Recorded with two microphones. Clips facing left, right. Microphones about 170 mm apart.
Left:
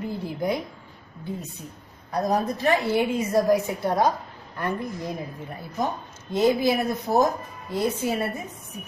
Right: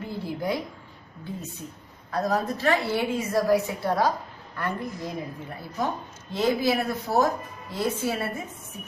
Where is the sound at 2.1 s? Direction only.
15° left (ahead or behind).